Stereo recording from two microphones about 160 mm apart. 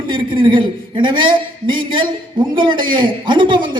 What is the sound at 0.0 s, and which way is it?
A man's voice, 30° right (ahead or behind).